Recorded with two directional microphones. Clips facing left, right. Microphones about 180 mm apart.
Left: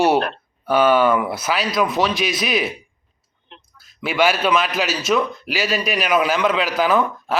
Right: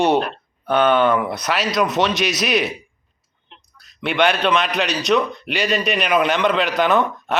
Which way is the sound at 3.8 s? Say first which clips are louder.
Even; centre (ahead or behind).